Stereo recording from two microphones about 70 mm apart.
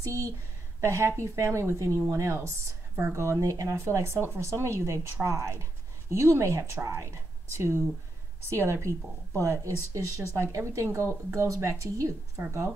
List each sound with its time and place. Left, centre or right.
0.0 s a woman's voice: right
9.9 s a woman's voice: right